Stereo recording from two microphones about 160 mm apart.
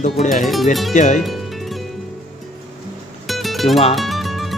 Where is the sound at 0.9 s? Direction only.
50° left (ahead or behind).